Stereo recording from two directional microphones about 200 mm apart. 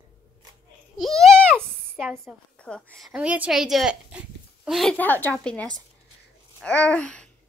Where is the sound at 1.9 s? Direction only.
Centre (ahead or behind).